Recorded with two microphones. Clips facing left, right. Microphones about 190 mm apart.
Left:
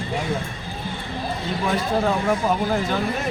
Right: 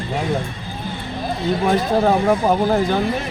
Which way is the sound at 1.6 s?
40° right (ahead or behind).